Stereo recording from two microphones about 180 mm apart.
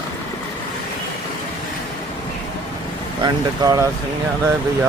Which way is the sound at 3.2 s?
20° right (ahead or behind).